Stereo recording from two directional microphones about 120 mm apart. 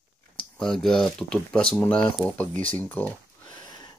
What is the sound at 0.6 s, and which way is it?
Speech, 5° left (ahead or behind).